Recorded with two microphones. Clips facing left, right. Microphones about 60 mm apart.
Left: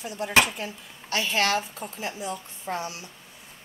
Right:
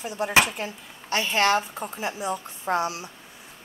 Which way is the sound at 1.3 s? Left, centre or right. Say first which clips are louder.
Right 4 dB; right.